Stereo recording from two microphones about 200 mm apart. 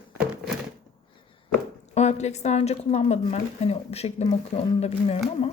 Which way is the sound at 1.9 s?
35° left (ahead or behind).